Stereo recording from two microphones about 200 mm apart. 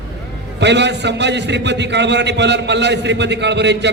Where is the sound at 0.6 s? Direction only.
60° right (ahead or behind).